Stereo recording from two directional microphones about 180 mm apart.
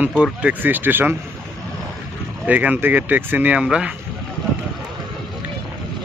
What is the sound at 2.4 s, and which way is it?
Speech, 10° right (ahead or behind).